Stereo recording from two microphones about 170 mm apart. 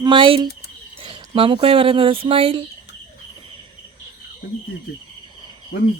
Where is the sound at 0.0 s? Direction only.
30° right (ahead or behind).